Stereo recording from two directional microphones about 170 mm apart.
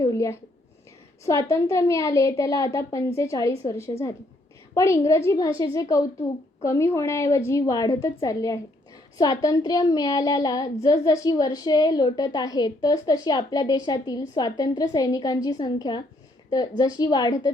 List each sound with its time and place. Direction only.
0.0 s a woman's voice: 20° left (ahead or behind)